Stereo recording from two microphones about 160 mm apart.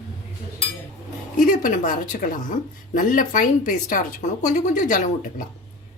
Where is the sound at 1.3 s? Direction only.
60° left (ahead or behind).